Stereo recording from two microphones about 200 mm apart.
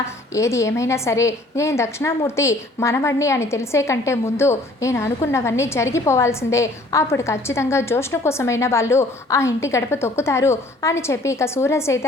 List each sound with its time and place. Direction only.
0.3 s a woman's voice: 15° left (ahead or behind)